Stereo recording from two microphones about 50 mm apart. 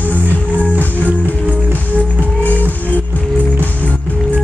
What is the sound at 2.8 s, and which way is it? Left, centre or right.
Music, left.